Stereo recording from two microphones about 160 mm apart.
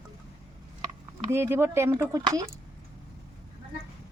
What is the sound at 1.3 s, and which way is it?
Speech, 15° right (ahead or behind).